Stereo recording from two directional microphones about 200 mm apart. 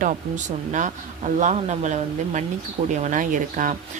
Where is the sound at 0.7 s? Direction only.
40° right (ahead or behind).